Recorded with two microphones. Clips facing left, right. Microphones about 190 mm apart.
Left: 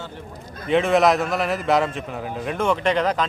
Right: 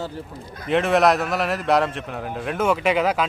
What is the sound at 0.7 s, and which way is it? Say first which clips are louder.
Speech: left 1 dB; centre (ahead or behind).